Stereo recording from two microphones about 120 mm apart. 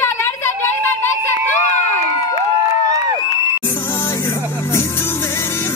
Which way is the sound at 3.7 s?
20° left (ahead or behind).